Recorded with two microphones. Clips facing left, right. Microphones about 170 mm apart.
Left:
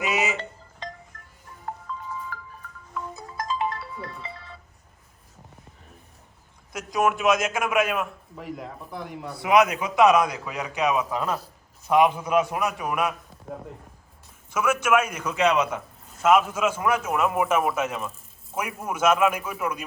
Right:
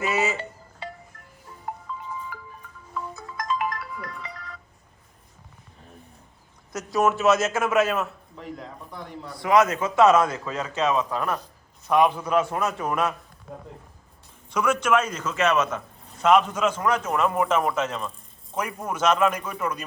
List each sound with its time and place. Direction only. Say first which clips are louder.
0.0 s a man's voice: right 1 dB; 20° left (ahead or behind)
0.3 s music: even; 10° right (ahead or behind)
2.3 s music: left 1 dB; 10° right (ahead or behind)
3.2 s music: even; 30° left (ahead or behind)
6.9 s a man's voice: right 2 dB; 10° left (ahead or behind)
14.5 s a man's voice: even; 5° left (ahead or behind)